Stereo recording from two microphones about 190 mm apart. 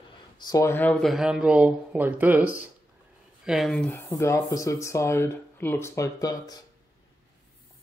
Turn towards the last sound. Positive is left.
turn(degrees=15)  # may be behind; listen again after turning